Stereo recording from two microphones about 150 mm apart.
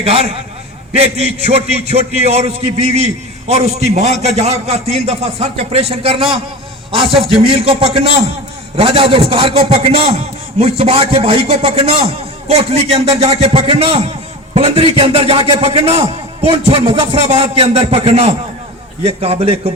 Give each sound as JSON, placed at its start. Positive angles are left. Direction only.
{"t": 0.0, "sound": "a man's voice", "side_deg": -40}